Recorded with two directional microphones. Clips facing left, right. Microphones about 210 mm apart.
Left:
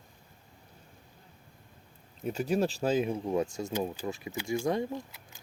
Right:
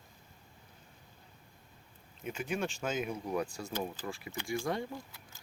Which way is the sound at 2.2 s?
40° left (ahead or behind).